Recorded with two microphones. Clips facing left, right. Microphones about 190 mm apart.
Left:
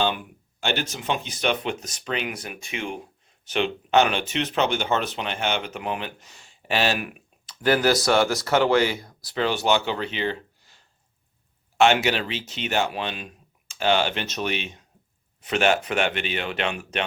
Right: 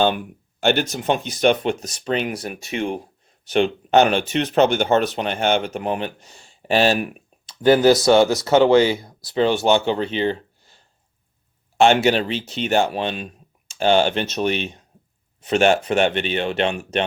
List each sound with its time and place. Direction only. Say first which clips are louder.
0.6 s speech: right 8 dB; 45° right (ahead or behind)
11.8 s speech: right 4 dB; 35° right (ahead or behind)